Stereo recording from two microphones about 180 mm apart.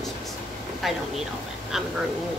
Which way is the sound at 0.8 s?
Centre (ahead or behind).